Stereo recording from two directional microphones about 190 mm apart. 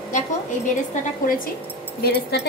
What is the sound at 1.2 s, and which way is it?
A woman's voice, 45° left (ahead or behind).